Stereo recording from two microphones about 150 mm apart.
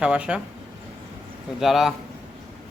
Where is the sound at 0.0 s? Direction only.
5° right (ahead or behind).